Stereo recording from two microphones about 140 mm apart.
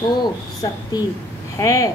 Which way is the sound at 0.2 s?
30° left (ahead or behind).